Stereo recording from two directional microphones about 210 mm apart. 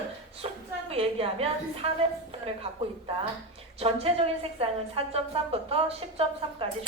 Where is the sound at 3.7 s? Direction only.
30° right (ahead or behind).